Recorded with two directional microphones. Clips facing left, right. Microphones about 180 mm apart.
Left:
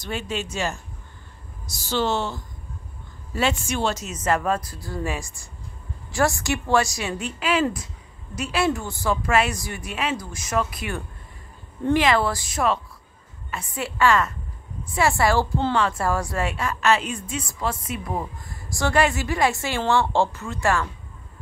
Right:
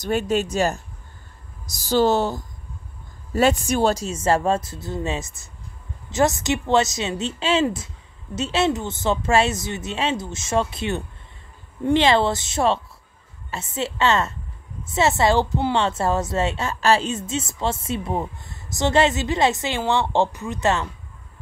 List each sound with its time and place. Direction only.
0.0 s speech: 45° right (ahead or behind)
1.8 s a woman's voice: 40° right (ahead or behind); by 20.9 s 20° right (ahead or behind)